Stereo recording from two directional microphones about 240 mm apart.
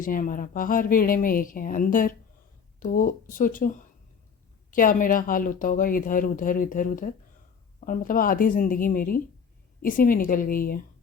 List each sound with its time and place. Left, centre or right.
0.0 s speech: left